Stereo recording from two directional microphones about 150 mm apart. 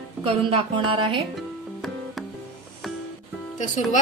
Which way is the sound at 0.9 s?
35° right (ahead or behind).